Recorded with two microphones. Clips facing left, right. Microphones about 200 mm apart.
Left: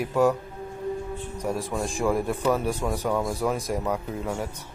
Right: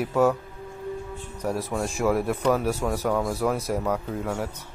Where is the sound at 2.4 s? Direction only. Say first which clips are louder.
Right 1 dB; 10° left (ahead or behind).